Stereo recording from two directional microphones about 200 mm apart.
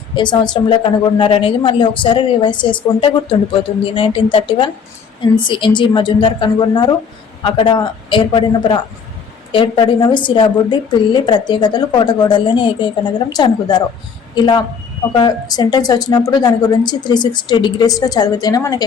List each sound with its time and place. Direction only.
0.2 s a woman's voice: 20° left (ahead or behind)